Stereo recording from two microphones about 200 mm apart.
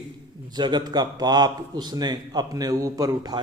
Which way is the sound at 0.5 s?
20° right (ahead or behind).